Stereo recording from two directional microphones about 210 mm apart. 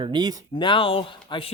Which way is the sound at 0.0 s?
20° right (ahead or behind).